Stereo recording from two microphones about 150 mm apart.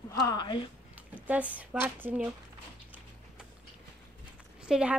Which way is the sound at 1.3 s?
10° right (ahead or behind).